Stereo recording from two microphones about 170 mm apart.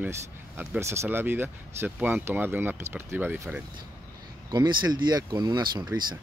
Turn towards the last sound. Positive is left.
turn(degrees=-25)  # may be behind; listen again after turning